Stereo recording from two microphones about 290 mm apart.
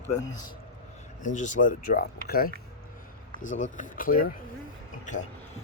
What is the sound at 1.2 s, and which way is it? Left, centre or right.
Speech, left.